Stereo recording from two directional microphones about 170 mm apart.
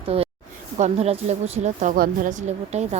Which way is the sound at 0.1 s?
35° right (ahead or behind).